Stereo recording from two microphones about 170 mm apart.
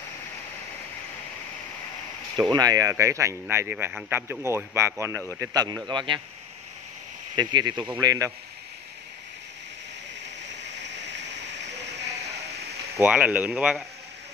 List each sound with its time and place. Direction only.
2.5 s speech: 20° right (ahead or behind)
7.3 s speech: 25° right (ahead or behind)
10.4 s a sound: 90° right
13.0 s speech: 10° right (ahead or behind)